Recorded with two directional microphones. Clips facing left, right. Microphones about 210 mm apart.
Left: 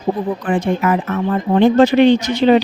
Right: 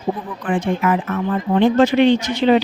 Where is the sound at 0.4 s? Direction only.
40° left (ahead or behind).